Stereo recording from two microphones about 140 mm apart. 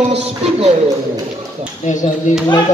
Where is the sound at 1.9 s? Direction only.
60° left (ahead or behind).